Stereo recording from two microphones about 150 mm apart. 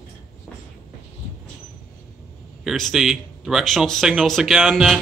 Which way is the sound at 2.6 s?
Centre (ahead or behind).